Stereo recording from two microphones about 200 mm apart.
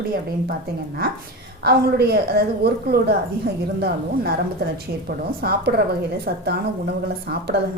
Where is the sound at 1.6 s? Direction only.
50° right (ahead or behind).